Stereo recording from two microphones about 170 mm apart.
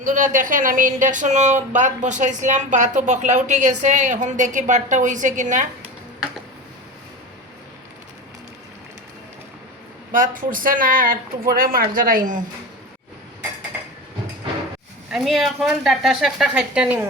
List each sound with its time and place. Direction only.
0.0 s speech: 50° right (ahead or behind)
10.1 s speech: 50° right (ahead or behind)
15.1 s a woman's voice: centre (ahead or behind)